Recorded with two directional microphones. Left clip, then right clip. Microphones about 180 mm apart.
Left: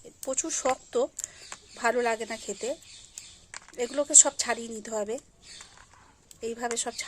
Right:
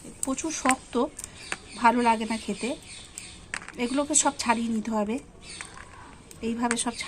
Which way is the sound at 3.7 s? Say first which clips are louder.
Left 3 dB; 65° left (ahead or behind).